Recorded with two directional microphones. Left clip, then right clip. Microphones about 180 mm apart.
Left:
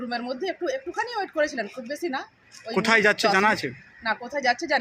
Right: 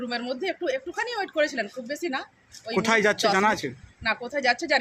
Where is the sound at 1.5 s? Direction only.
25° right (ahead or behind).